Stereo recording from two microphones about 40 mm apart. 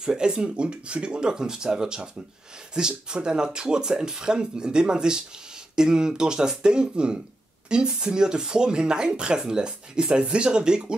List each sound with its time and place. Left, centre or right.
0.0 s speech: centre